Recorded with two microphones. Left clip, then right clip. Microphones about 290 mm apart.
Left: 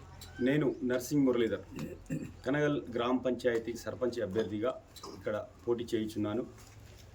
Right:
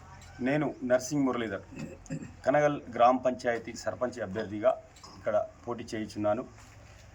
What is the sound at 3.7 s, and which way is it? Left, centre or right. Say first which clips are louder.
Speech: right 2 dB; centre.